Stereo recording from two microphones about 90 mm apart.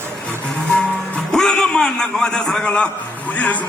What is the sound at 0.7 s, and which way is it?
Music, 10° left (ahead or behind).